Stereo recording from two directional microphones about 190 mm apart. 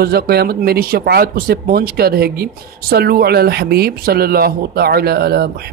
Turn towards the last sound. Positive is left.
turn(degrees=-55)  # may be behind; listen again after turning